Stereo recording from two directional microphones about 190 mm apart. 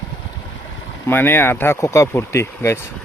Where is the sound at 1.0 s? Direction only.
10° left (ahead or behind).